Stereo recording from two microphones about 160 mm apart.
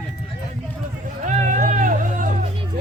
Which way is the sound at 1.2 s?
50° right (ahead or behind).